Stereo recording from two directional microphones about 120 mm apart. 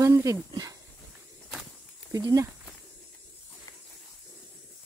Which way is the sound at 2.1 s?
30° right (ahead or behind).